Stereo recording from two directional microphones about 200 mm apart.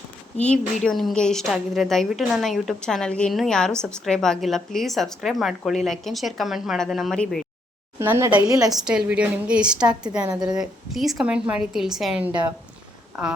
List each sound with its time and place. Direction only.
0.4 s a woman's voice: 5° left (ahead or behind)
7.9 s a woman's voice: 10° right (ahead or behind)
8.8 s a woman's voice: 5° right (ahead or behind)